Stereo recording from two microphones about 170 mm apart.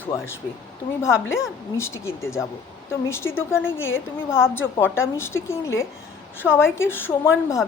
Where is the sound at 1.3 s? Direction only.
15° left (ahead or behind).